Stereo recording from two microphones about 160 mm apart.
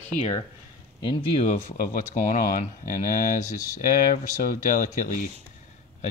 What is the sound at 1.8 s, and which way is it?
Speech, 55° left (ahead or behind).